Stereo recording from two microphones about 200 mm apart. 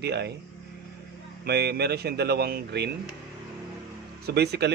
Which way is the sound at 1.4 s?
55° right (ahead or behind).